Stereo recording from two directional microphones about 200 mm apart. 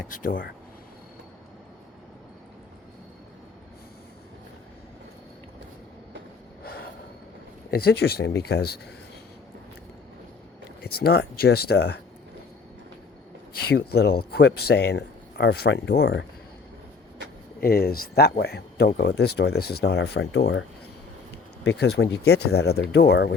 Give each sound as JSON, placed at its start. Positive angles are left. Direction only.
{"t": 0.0, "sound": "speech", "side_deg": 40}
{"t": 6.6, "sound": "snort", "side_deg": 50}
{"t": 7.7, "sound": "speech", "side_deg": 50}
{"t": 10.8, "sound": "speech", "side_deg": 50}
{"t": 13.7, "sound": "speech", "side_deg": 55}
{"t": 17.6, "sound": "speech", "side_deg": 50}